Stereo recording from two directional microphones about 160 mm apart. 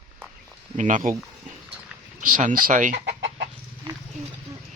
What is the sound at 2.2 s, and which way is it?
Speech, 55° right (ahead or behind).